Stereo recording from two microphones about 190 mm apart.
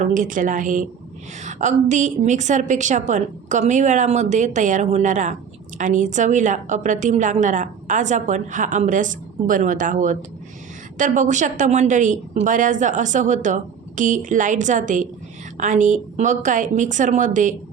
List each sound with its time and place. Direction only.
0.0 s a woman's voice: 40° right (ahead or behind)